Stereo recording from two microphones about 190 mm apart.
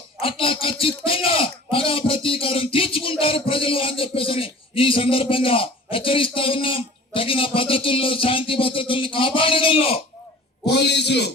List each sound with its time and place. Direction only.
0.2 s a man's voice: 30° left (ahead or behind)
10.7 s a man's voice: 65° left (ahead or behind)